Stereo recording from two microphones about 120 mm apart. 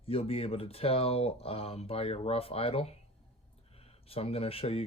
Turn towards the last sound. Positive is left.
turn(degrees=55)  # may be behind; listen again after turning